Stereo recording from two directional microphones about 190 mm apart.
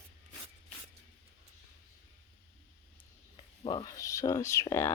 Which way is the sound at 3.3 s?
30° left (ahead or behind).